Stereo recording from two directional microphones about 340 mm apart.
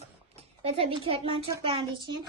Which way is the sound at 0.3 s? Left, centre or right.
Centre.